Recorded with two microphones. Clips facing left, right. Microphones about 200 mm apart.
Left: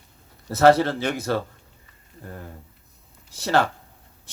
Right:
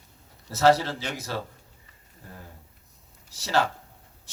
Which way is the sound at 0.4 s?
55° left (ahead or behind).